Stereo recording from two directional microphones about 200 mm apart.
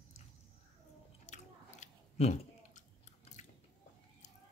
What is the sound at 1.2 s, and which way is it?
Chewing, 35° left (ahead or behind).